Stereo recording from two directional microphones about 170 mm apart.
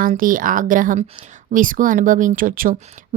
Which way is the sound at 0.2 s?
55° right (ahead or behind).